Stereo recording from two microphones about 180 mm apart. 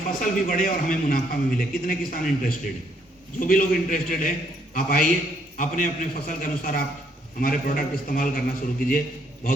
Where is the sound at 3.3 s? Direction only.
50° left (ahead or behind).